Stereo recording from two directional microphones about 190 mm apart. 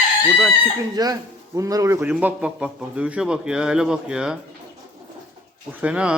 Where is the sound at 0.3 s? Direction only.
5° right (ahead or behind).